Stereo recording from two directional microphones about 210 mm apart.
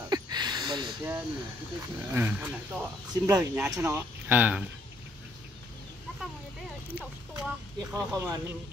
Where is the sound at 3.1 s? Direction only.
20° right (ahead or behind).